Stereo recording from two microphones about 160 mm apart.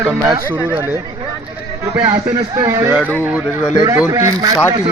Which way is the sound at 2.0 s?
25° right (ahead or behind).